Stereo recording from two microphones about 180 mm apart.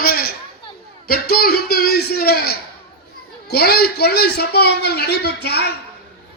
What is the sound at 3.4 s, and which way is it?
A man's voice, 60° left (ahead or behind).